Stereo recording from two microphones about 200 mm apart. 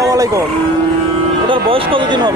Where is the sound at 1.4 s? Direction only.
25° right (ahead or behind).